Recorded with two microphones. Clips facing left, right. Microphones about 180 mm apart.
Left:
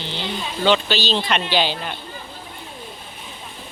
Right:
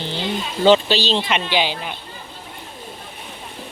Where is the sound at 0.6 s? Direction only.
30° right (ahead or behind).